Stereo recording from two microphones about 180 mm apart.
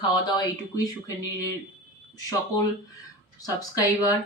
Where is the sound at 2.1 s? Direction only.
20° left (ahead or behind).